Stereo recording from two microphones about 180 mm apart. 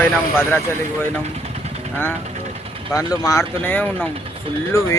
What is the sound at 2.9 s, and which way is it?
Speech, 20° left (ahead or behind).